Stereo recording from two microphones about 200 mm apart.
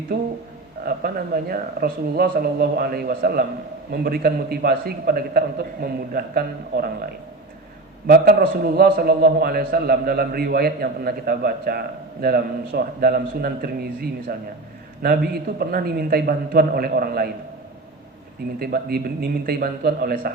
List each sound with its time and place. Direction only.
0.9 s a man's voice: 45° right (ahead or behind)
18.6 s a man's voice: 50° right (ahead or behind)